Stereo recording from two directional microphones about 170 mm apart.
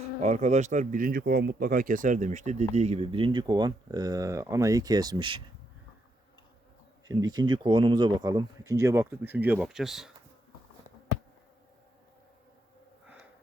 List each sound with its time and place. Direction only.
0.2 s speech: 45° right (ahead or behind); by 5.4 s 25° right (ahead or behind)
7.1 s speech: 25° right (ahead or behind); by 10.1 s centre (ahead or behind)